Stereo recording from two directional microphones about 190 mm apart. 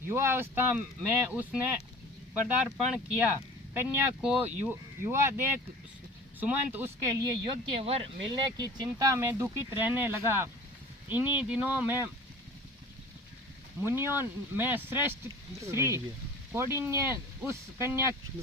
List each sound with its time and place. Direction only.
0.1 s speech: 10° right (ahead or behind)
7.4 s speech: 25° right (ahead or behind); by 12.1 s 10° right (ahead or behind)
13.8 s speech: 10° right (ahead or behind)